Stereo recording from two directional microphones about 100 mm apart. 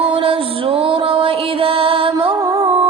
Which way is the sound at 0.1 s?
65° right (ahead or behind).